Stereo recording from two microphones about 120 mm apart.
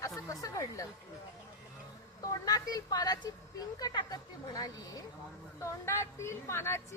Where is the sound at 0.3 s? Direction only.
25° left (ahead or behind).